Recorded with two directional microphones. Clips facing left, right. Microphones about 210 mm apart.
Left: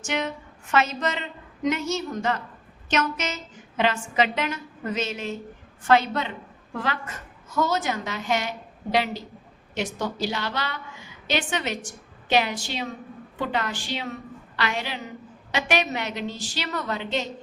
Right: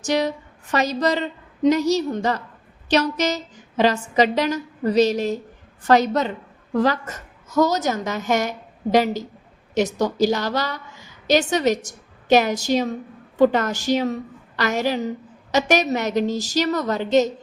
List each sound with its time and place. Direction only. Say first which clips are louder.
0.0 s a woman's voice: right 7 dB; 35° right (ahead or behind)